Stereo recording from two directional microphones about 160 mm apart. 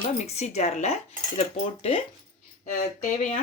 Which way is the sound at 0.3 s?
45° left (ahead or behind).